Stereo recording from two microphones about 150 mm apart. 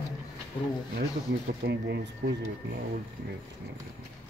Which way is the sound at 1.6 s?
90° right.